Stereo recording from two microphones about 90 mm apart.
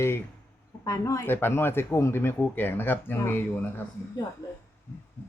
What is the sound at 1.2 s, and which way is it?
Speech, 25° left (ahead or behind).